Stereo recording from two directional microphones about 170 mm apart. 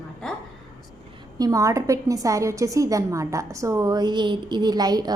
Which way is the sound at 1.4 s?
20° right (ahead or behind).